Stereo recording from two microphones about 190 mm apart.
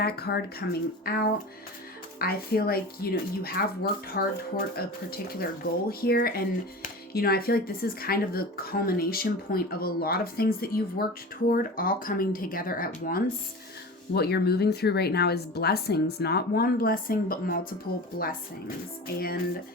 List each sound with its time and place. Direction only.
0.0 s speech: 55° left (ahead or behind)
19.0 s speech: 55° left (ahead or behind)